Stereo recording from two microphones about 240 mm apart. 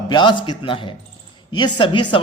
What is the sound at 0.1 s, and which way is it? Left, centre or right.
Speech, centre.